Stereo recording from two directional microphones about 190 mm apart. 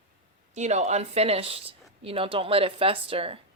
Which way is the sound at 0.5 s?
35° right (ahead or behind).